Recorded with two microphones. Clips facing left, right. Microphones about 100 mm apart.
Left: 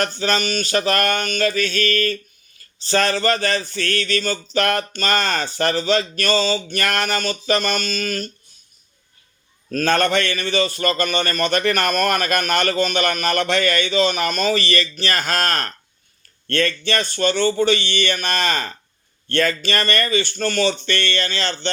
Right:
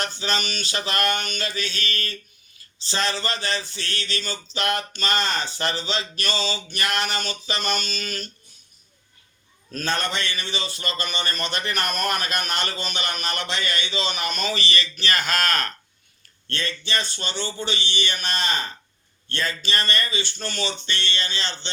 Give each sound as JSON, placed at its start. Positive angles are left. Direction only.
{"t": 0.0, "sound": "speech", "side_deg": 50}
{"t": 9.7, "sound": "speech", "side_deg": 55}
{"t": 16.5, "sound": "speech", "side_deg": 55}